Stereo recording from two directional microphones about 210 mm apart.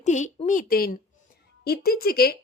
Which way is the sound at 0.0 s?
35° left (ahead or behind).